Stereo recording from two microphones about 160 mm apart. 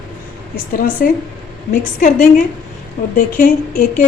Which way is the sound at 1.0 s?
65° left (ahead or behind).